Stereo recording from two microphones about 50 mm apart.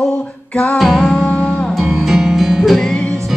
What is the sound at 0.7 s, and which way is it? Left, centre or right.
Music, centre.